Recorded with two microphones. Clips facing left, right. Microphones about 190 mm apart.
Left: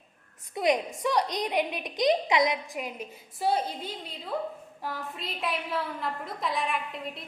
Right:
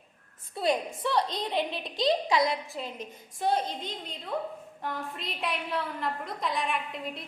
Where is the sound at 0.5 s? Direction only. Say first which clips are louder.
Left 2 dB; 15° left (ahead or behind).